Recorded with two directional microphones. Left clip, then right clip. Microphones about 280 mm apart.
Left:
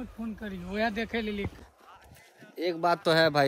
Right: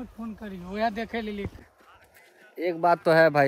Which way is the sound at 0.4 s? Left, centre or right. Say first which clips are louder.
Right 2 dB; right.